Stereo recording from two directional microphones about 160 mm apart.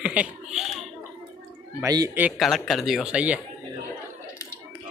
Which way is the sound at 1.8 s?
20° right (ahead or behind).